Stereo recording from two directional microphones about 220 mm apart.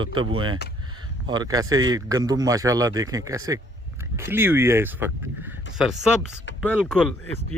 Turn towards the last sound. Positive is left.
turn(degrees=5)  # may be behind; listen again after turning